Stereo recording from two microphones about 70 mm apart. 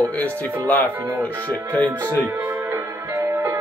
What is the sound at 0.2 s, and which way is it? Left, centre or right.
Speech, left.